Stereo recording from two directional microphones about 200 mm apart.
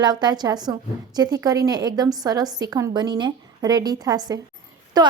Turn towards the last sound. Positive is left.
turn(degrees=-20)  # may be behind; listen again after turning